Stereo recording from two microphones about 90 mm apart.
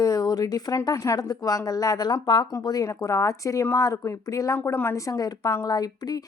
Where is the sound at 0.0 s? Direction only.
45° left (ahead or behind).